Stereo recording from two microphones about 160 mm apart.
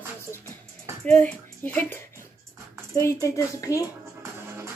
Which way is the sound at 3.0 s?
20° left (ahead or behind).